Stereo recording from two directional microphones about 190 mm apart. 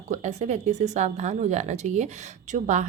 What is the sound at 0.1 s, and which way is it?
Speech, 35° right (ahead or behind).